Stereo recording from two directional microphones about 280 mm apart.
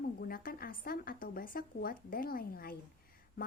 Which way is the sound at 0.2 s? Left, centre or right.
Left.